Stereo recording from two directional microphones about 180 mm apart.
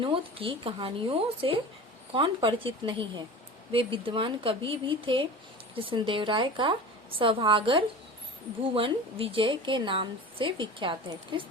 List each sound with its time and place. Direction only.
0.0 s a woman's voice: 30° right (ahead or behind)